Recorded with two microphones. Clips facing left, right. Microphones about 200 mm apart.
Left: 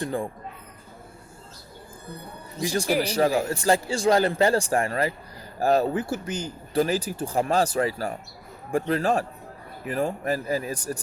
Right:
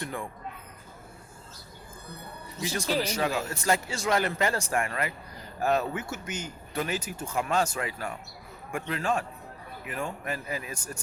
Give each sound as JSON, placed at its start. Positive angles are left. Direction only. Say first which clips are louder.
{"t": 0.0, "sound": "speech", "louder": "left 7 dB", "side_deg": 35}
{"t": 3.0, "sound": "speech", "louder": "left 6 dB", "side_deg": 35}